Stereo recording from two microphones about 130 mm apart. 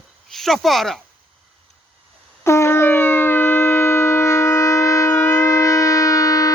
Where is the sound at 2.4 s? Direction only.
20° left (ahead or behind).